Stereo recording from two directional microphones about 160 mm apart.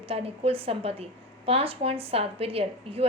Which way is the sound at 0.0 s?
35° right (ahead or behind).